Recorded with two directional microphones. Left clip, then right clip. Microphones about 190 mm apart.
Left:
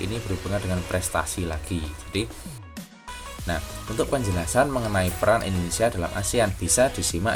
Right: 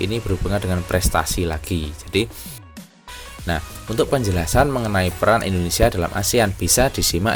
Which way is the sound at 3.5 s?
45° right (ahead or behind).